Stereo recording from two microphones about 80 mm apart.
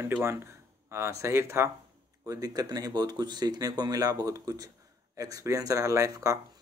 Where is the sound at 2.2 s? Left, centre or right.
Right.